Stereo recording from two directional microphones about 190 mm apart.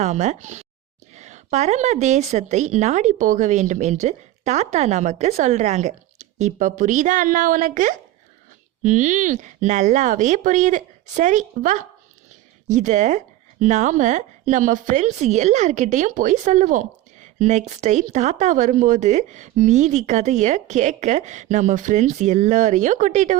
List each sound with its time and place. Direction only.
0.0 s speech: 40° right (ahead or behind)